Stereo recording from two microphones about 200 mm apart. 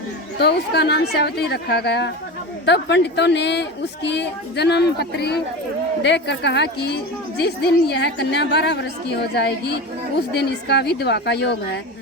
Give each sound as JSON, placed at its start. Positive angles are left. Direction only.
{"t": 0.3, "sound": "a woman's voice", "side_deg": 55}